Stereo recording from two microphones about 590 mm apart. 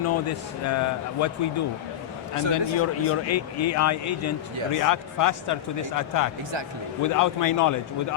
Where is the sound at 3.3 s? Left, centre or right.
Left.